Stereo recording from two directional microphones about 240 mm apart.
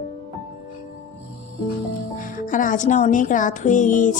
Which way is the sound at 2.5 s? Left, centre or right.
Left.